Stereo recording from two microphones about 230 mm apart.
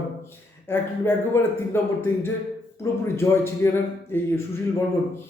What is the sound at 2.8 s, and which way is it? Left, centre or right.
Speech, centre.